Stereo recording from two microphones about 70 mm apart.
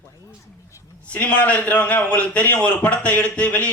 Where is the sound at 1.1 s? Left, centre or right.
Left.